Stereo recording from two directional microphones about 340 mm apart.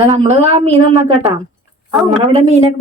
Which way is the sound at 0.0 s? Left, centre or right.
Centre.